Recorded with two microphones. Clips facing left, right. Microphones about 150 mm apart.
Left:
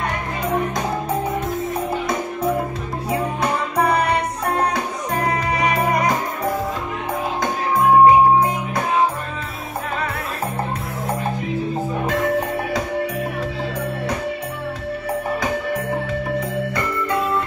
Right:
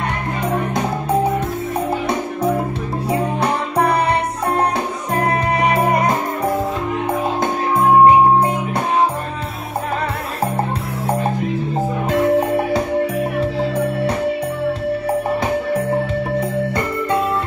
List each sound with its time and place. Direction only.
3.1 s music: 30° right (ahead or behind)
5.1 s music: 25° right (ahead or behind)
12.1 s music: 30° right (ahead or behind)